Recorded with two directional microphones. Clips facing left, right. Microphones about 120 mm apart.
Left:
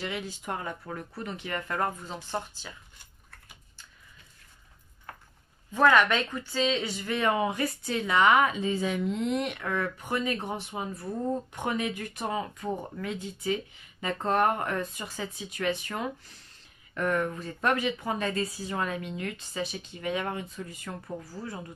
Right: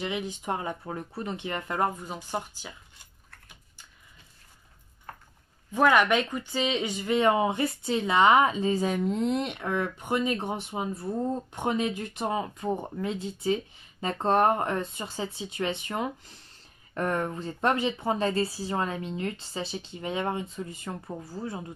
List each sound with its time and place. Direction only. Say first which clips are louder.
0.0 s speech: right 3 dB; 20° right (ahead or behind)
5.7 s speech: even; 15° right (ahead or behind)
16.9 s speech: even; 35° right (ahead or behind)